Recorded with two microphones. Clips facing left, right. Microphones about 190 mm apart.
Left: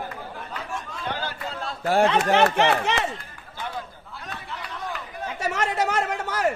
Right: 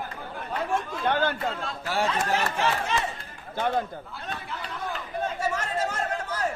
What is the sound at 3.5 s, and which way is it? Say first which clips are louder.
Speech: right 8 dB; 55° right (ahead or behind).